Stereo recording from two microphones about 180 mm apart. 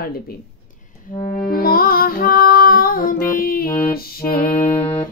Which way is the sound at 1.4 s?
55° left (ahead or behind).